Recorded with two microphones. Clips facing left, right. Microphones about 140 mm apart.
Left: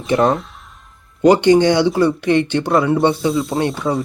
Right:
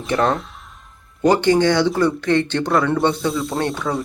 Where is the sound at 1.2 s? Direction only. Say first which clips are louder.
Left 4 dB; 15° left (ahead or behind); by 3.6 s centre (ahead or behind).